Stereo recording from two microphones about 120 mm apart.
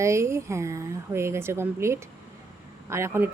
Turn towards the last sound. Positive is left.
turn(degrees=-20)  # may be behind; listen again after turning